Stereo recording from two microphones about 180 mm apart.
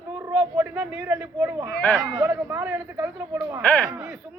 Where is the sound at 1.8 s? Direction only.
Centre (ahead or behind).